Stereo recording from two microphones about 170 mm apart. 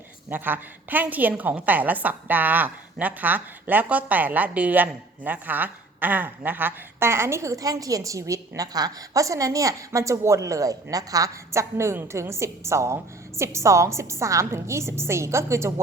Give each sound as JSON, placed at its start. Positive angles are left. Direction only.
{"t": 0.3, "sound": "a woman's voice", "side_deg": -10}